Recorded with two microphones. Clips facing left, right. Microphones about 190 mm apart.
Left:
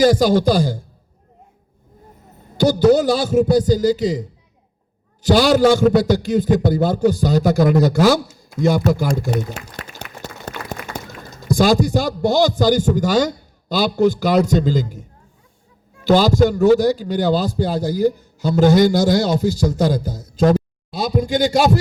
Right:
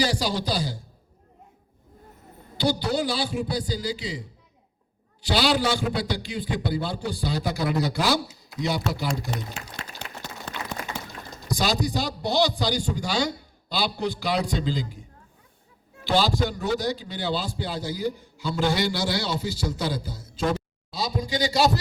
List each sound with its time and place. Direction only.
0.0 s a man's voice: 45° left (ahead or behind)
2.6 s a man's voice: 45° left (ahead or behind)
16.0 s a man's voice: 45° left (ahead or behind)